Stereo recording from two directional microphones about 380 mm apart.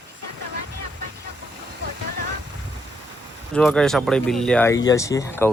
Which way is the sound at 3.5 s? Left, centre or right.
Centre.